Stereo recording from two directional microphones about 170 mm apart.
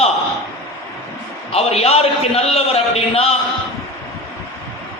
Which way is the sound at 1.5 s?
35° left (ahead or behind).